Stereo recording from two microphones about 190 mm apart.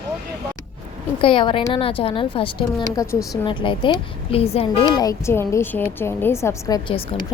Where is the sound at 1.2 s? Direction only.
25° left (ahead or behind).